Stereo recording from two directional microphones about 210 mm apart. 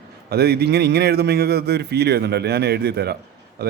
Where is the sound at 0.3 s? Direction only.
50° right (ahead or behind).